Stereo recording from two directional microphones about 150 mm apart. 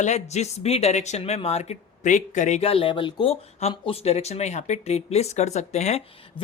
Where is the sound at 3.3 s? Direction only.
45° left (ahead or behind).